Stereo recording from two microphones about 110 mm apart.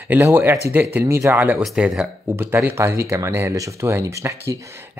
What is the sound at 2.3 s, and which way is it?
Speech, 20° right (ahead or behind).